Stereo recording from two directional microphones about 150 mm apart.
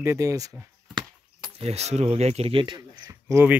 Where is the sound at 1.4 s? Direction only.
40° right (ahead or behind).